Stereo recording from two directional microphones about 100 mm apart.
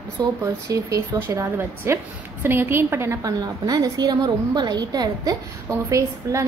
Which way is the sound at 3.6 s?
40° right (ahead or behind).